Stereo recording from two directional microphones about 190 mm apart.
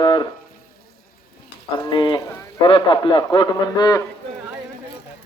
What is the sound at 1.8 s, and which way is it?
A man's voice, 20° left (ahead or behind).